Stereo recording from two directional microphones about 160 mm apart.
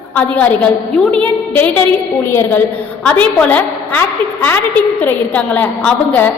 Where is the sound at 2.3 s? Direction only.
15° left (ahead or behind).